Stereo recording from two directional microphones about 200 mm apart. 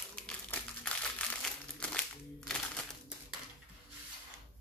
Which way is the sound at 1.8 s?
5° left (ahead or behind).